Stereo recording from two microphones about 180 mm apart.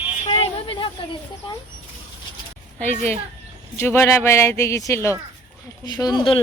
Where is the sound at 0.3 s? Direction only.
30° left (ahead or behind).